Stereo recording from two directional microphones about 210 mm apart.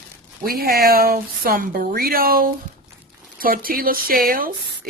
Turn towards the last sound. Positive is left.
turn(degrees=-45)  # may be behind; listen again after turning